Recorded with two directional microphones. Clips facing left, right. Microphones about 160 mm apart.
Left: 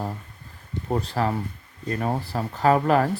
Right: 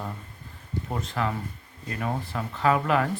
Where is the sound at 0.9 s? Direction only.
35° left (ahead or behind).